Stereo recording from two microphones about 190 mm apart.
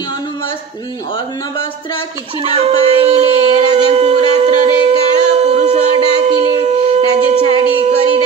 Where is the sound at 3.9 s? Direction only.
30° right (ahead or behind).